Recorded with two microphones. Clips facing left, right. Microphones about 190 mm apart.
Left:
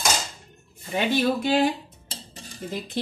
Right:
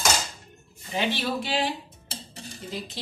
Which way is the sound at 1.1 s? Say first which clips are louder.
Left 10 dB; 50° left (ahead or behind).